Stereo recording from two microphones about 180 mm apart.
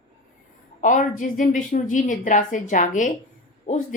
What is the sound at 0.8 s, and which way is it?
Speech, 45° left (ahead or behind).